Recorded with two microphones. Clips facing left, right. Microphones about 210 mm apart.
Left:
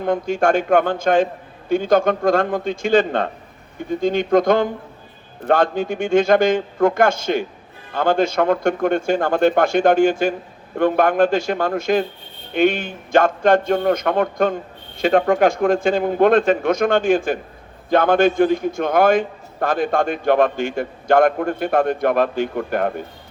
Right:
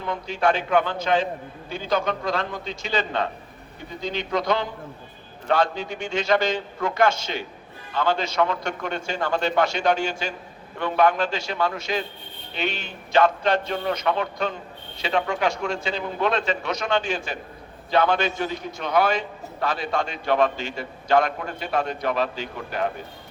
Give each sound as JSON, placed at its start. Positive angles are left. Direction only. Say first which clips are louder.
{"t": 0.0, "sound": "a man's voice", "louder": "left 6 dB", "side_deg": 50}